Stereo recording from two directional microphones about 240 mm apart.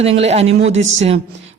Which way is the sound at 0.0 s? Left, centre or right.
Right.